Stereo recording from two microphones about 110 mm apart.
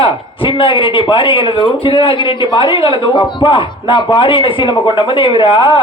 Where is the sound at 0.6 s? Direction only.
50° left (ahead or behind).